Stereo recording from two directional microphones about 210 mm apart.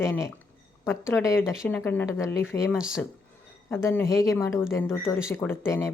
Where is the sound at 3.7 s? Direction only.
10° left (ahead or behind).